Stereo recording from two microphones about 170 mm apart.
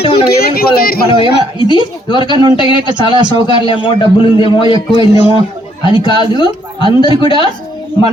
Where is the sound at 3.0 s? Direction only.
25° right (ahead or behind).